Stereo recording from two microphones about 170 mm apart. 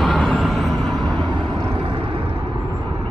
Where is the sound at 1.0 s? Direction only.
25° right (ahead or behind).